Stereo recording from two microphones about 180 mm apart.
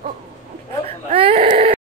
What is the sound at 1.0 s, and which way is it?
Speech, 30° right (ahead or behind).